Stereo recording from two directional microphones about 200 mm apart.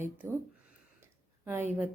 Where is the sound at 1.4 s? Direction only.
10° right (ahead or behind).